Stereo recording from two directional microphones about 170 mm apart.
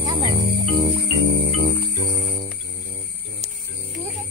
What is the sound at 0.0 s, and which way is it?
Music, 25° right (ahead or behind).